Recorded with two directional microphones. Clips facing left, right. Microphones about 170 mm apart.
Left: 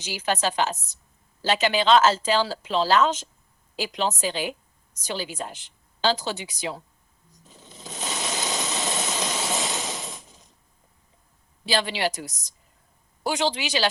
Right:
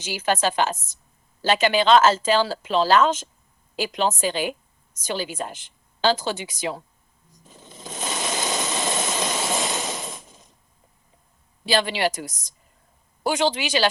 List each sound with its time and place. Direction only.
0.0 s speech: 50° right (ahead or behind)
7.4 s a sound: 50° right (ahead or behind)
11.6 s speech: 50° right (ahead or behind)